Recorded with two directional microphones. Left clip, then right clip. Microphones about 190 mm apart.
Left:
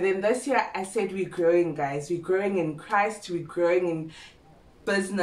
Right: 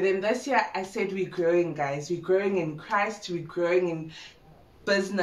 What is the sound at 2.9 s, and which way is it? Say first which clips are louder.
Speech: left 2 dB; 15° left (ahead or behind).